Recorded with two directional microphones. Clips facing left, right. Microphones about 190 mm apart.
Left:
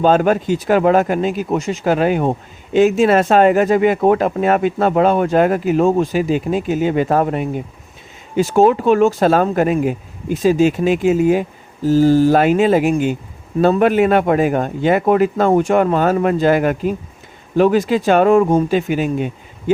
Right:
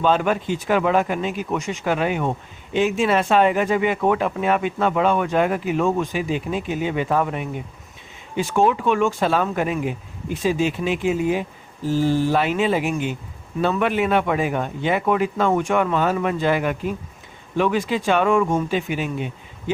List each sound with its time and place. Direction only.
0.0 s speech: 45° left (ahead or behind)